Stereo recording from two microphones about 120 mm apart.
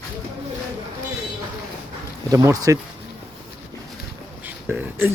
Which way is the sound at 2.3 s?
30° right (ahead or behind).